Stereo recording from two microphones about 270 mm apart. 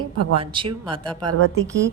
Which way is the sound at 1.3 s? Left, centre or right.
Right.